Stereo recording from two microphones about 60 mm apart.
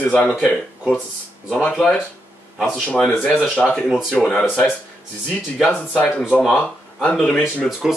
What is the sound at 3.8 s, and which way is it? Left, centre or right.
Speech, centre.